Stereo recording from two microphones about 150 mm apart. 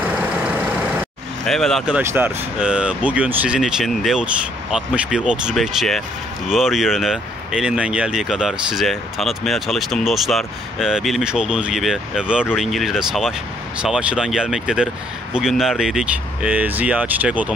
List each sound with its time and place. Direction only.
1.4 s speech: centre (ahead or behind)
2.0 s speech: 10° right (ahead or behind)